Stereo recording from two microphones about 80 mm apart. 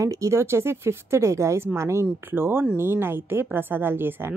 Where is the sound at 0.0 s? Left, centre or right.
Right.